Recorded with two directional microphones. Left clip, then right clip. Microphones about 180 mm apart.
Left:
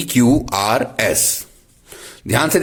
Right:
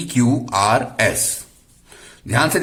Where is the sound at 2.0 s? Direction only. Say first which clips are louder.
Left 1 dB; 35° left (ahead or behind).